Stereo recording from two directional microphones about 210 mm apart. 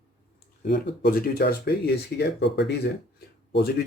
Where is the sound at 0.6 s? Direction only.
50° left (ahead or behind).